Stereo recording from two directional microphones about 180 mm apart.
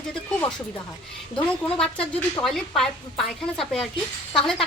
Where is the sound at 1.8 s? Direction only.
5° left (ahead or behind).